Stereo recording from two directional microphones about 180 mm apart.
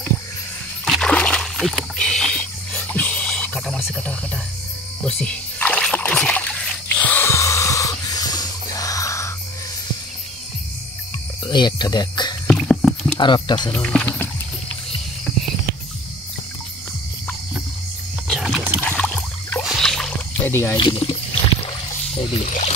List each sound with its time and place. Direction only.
0.8 s rowboat: centre (ahead or behind)
3.9 s speech: 5° left (ahead or behind)
5.0 s splash: 5° left (ahead or behind)
11.4 s speech: 25° left (ahead or behind)
12.4 s dog: 5° left (ahead or behind)
13.2 s speech: 25° left (ahead or behind)
13.6 s speech: 5° left (ahead or behind)
14.0 s rowboat: 10° left (ahead or behind)
18.3 s a sound: centre (ahead or behind)
18.9 s rowboat: 5° left (ahead or behind)
20.7 s speech: 30° left (ahead or behind)